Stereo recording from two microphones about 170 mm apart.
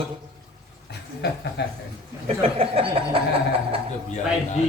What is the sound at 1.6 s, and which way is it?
Speech, 85° left.